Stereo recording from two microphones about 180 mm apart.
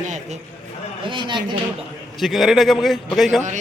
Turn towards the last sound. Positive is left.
turn(degrees=0)  # may be behind; listen again after turning